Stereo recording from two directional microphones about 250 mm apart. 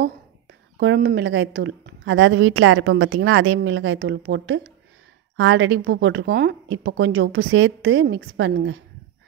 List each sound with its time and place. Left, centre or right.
0.7 s a woman's voice: right